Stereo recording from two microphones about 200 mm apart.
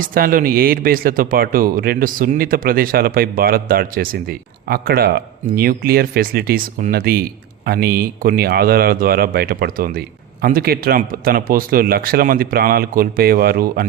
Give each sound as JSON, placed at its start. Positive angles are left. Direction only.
{"t": 0.0, "sound": "speech", "side_deg": -45}